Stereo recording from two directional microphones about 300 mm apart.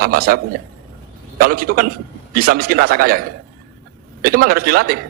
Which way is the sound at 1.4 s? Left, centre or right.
Right.